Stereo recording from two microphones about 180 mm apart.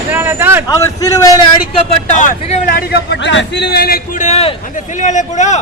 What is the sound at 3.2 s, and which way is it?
Speech, 75° left (ahead or behind).